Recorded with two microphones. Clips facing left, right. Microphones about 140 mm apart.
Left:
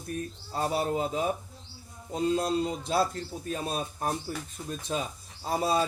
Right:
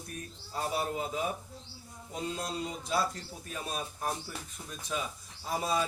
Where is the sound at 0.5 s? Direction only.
35° left (ahead or behind).